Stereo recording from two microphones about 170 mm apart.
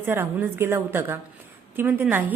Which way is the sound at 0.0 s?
10° right (ahead or behind).